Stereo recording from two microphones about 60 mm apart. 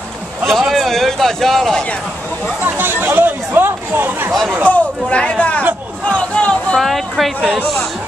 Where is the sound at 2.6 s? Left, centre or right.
Right.